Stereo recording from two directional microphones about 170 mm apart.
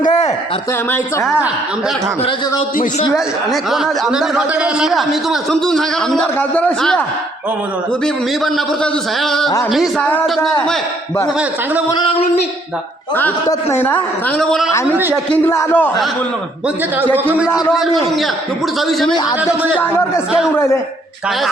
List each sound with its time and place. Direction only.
0.9 s a man's voice: 10° left (ahead or behind)
3.1 s speech: centre (ahead or behind)
8.0 s speech: 5° left (ahead or behind)
11.9 s speech: 30° left (ahead or behind)
13.1 s a man's voice: 15° left (ahead or behind)
17.2 s a man's voice: 10° right (ahead or behind)
19.5 s a man's voice: 15° left (ahead or behind)